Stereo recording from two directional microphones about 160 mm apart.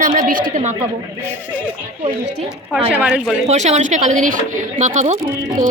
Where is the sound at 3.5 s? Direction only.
45° right (ahead or behind).